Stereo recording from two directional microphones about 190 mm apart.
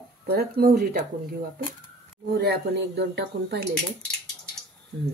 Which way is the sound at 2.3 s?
60° right (ahead or behind).